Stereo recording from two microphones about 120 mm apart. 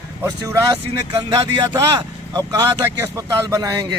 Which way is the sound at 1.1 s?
45° right (ahead or behind).